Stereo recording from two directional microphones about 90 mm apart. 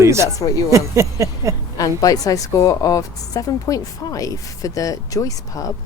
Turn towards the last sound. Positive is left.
turn(degrees=40)  # may be behind; listen again after turning